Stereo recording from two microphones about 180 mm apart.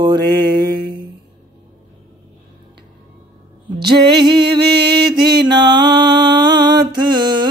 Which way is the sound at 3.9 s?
25° right (ahead or behind).